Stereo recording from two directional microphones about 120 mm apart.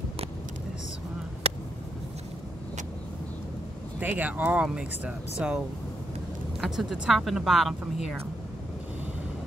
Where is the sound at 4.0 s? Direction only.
15° right (ahead or behind); by 7.8 s centre (ahead or behind).